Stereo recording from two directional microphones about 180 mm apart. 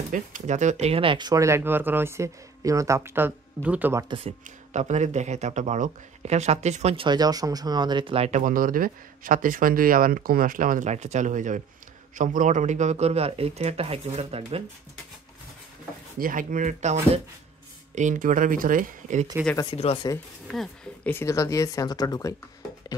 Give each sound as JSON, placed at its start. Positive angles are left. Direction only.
{"t": 0.1, "sound": "speech", "side_deg": -45}
{"t": 4.2, "sound": "speech", "side_deg": -35}
{"t": 7.1, "sound": "speech", "side_deg": -20}
{"t": 16.2, "sound": "speech", "side_deg": -50}
{"t": 19.5, "sound": "speech", "side_deg": 25}
{"t": 20.4, "sound": "speech", "side_deg": 5}